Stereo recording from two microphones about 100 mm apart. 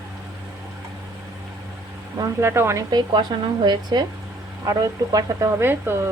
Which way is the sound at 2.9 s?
45° right (ahead or behind).